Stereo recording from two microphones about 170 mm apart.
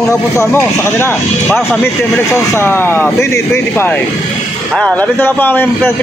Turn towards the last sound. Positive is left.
turn(degrees=10)  # may be behind; listen again after turning